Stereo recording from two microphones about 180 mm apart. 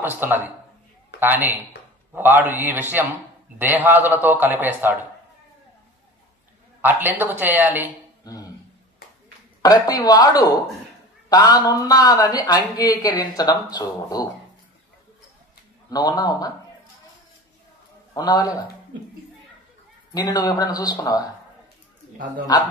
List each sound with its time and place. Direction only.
0.0 s a man's voice: 10° right (ahead or behind)
6.8 s a man's voice: 10° right (ahead or behind)
8.2 s a sound: 20° left (ahead or behind)
9.6 s speech: 20° left (ahead or behind)
15.9 s speech: 20° left (ahead or behind)
18.1 s speech: 20° left (ahead or behind)
20.2 s speech: 20° left (ahead or behind)